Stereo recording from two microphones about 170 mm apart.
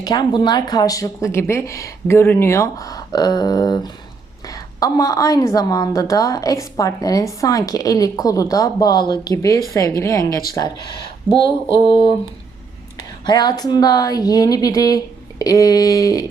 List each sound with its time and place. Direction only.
0.0 s a woman's voice: 25° left (ahead or behind)